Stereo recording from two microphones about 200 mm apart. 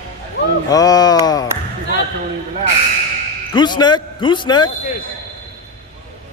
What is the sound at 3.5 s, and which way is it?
A man's voice, 20° left (ahead or behind).